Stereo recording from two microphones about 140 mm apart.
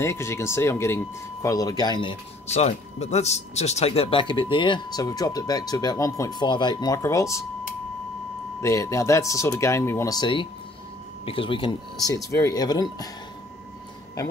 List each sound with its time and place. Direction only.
0.0 s speech: 20° left (ahead or behind)
2.5 s speech: 50° left (ahead or behind); by 7.4 s 20° left (ahead or behind)
8.5 s speech: 20° left (ahead or behind)
10.1 s speech: 35° left (ahead or behind)